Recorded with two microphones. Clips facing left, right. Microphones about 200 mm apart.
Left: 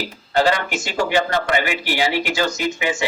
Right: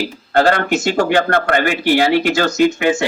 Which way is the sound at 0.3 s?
55° right (ahead or behind).